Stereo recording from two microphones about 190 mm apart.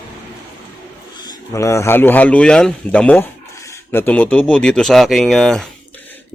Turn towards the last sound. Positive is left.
turn(degrees=0)  # may be behind; listen again after turning